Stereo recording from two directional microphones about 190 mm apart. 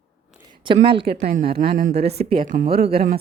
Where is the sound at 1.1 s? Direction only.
55° right (ahead or behind).